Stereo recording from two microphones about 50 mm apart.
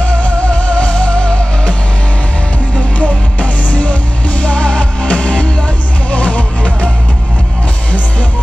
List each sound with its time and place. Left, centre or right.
0.2 s music: centre
3.0 s music: left